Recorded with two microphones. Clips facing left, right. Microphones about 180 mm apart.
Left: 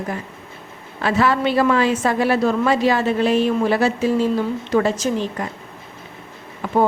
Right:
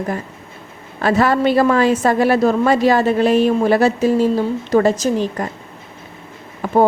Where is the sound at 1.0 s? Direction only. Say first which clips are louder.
Right 3 dB; 45° right (ahead or behind).